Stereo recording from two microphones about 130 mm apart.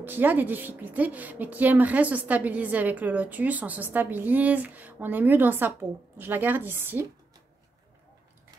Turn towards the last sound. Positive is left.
turn(degrees=-15)  # may be behind; listen again after turning